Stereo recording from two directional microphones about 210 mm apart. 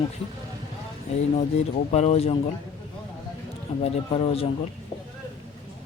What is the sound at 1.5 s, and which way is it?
Speech, 30° left (ahead or behind).